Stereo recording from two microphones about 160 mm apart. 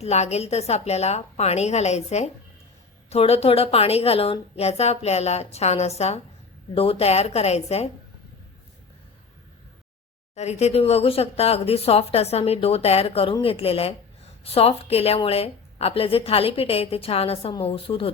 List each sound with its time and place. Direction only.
0.0 s speech: 45° left (ahead or behind)
10.3 s speech: 45° left (ahead or behind)